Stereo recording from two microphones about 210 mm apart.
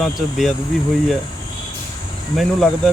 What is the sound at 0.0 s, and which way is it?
Speech, centre (ahead or behind).